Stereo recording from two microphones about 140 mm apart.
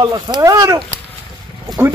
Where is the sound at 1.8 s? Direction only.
20° right (ahead or behind).